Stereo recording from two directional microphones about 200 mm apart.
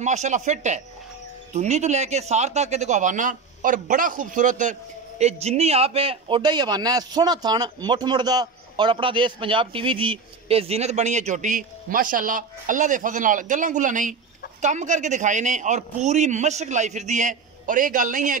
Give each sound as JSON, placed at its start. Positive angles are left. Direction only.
{"t": 0.0, "sound": "a man's voice", "side_deg": -35}